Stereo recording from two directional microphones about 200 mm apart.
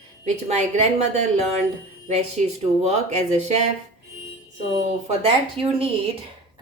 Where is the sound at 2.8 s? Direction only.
35° right (ahead or behind).